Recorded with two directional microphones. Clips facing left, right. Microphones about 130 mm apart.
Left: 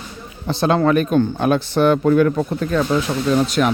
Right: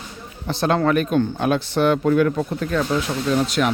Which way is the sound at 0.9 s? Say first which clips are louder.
Left 3 dB; 40° left (ahead or behind).